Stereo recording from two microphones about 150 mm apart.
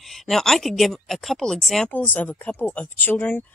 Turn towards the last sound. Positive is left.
turn(degrees=10)  # may be behind; listen again after turning